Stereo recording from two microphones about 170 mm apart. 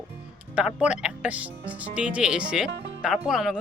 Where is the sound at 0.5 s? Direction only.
5° right (ahead or behind).